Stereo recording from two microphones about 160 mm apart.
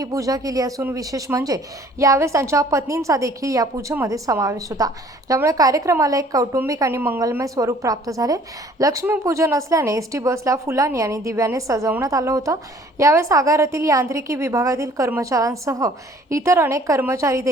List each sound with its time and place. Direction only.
0.0 s speech: 20° right (ahead or behind)